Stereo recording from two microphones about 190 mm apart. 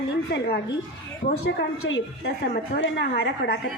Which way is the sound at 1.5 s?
80° left.